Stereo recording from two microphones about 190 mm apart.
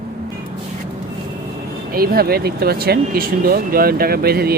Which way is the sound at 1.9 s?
50° right (ahead or behind).